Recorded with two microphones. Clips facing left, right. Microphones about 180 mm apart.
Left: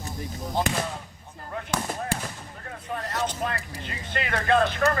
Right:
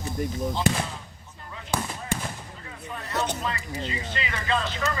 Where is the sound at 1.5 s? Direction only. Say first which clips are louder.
Left 1 dB; 55° left (ahead or behind).